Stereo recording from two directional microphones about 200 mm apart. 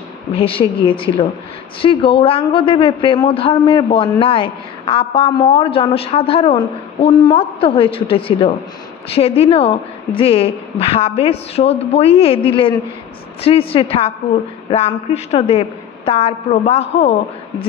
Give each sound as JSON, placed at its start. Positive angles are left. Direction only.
{"t": 0.3, "sound": "a man's voice", "side_deg": 25}